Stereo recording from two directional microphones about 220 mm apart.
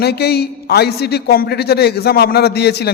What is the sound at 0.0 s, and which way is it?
A man's voice, 45° left (ahead or behind).